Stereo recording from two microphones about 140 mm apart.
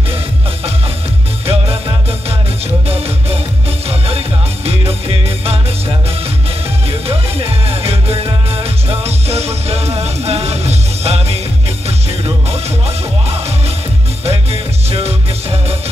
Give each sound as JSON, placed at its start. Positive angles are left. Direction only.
{"t": 1.4, "sound": "music", "side_deg": -45}
{"t": 4.6, "sound": "music", "side_deg": -45}
{"t": 6.9, "sound": "music", "side_deg": -45}
{"t": 12.4, "sound": "music", "side_deg": -45}